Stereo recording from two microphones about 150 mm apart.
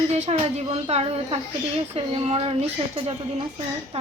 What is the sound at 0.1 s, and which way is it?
A woman's voice, 45° right (ahead or behind).